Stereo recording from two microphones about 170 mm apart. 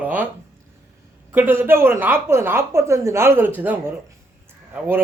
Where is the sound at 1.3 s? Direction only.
10° right (ahead or behind).